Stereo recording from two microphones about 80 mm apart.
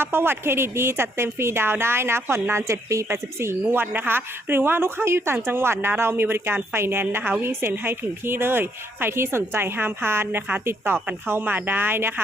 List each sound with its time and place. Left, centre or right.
0.0 s speech: right